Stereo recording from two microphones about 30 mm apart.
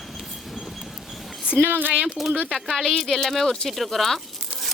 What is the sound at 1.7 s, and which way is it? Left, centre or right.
Speech, right.